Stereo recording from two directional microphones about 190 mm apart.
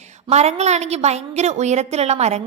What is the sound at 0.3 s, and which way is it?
A woman's voice, 35° right (ahead or behind).